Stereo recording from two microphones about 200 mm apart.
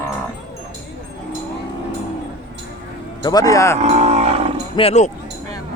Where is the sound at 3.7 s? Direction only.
35° right (ahead or behind).